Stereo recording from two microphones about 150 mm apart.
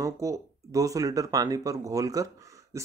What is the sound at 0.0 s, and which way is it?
Mantra, 20° right (ahead or behind).